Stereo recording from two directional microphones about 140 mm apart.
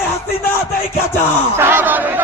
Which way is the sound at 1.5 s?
15° right (ahead or behind).